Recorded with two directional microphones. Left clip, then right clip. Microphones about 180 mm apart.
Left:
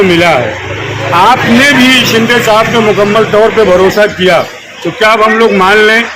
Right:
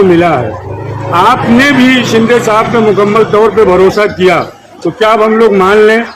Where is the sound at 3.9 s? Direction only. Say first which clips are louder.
Left 1 dB; 60° right (ahead or behind).